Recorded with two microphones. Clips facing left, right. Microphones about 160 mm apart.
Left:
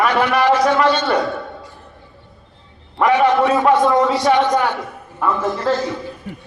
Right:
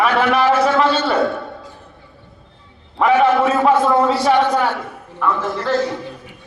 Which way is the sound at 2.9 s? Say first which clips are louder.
Even; 5° right (ahead or behind).